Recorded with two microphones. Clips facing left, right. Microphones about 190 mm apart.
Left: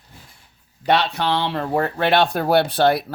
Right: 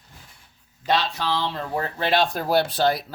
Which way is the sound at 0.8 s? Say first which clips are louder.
Left 4 dB; 65° left (ahead or behind).